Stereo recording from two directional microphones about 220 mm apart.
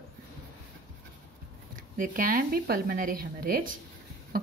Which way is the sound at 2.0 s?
40° right (ahead or behind).